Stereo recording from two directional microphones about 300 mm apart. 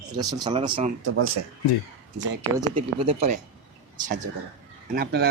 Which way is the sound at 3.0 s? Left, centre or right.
Right.